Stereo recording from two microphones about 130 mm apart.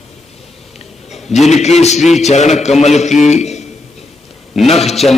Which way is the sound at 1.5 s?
60° left (ahead or behind).